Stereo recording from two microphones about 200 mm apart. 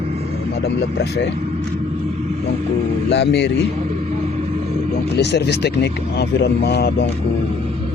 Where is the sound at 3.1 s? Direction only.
60° left (ahead or behind).